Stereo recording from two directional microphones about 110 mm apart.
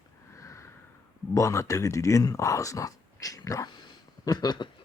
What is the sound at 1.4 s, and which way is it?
Speech, 30° left (ahead or behind).